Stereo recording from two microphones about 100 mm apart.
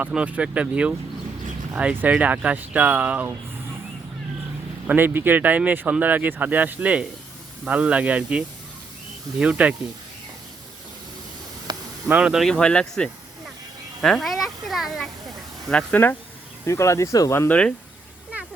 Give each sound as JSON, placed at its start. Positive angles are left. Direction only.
{"t": 0.1, "sound": "speech", "side_deg": -10}
{"t": 4.9, "sound": "speech", "side_deg": -20}
{"t": 11.7, "sound": "snake", "side_deg": -45}
{"t": 12.0, "sound": "speech", "side_deg": -10}
{"t": 14.0, "sound": "a sound", "side_deg": 0}
{"t": 15.7, "sound": "speech", "side_deg": 15}
{"t": 16.6, "sound": "speech", "side_deg": 30}
{"t": 17.5, "sound": "speech", "side_deg": 15}